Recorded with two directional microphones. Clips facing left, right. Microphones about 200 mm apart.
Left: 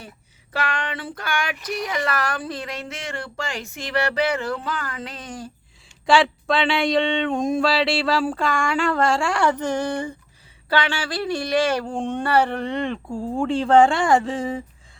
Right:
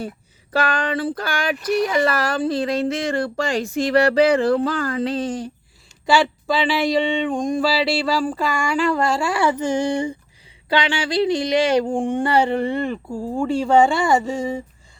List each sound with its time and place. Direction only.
0.5 s speech: 35° right (ahead or behind)
6.1 s a sound: centre (ahead or behind)
10.7 s speech: 15° right (ahead or behind); by 14.6 s centre (ahead or behind)